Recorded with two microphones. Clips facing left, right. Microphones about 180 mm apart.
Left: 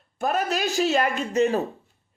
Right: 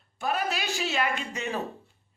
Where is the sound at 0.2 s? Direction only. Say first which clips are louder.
Left 5 dB; 45° left (ahead or behind).